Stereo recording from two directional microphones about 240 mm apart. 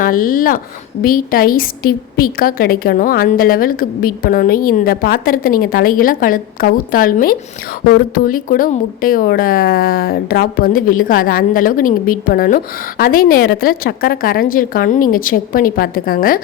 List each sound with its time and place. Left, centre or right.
0.0 s speech: left